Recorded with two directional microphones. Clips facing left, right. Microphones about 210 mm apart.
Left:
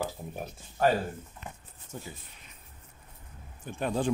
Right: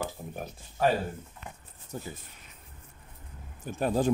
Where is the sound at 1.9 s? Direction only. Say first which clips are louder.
Right 3 dB; 35° right (ahead or behind).